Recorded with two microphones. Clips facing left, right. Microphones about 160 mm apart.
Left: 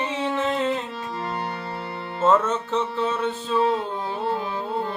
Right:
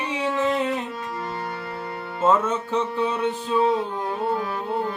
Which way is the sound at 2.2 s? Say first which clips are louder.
Left 1 dB; 10° right (ahead or behind).